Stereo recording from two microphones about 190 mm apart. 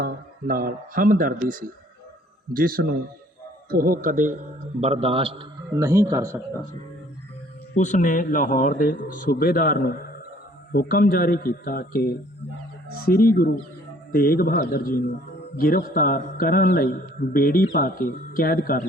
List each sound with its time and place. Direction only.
0.0 s speech: 50° right (ahead or behind)
4.8 s a man's voice: 30° right (ahead or behind)
5.7 s speech: 15° right (ahead or behind)
7.8 s a man's voice: 40° left (ahead or behind)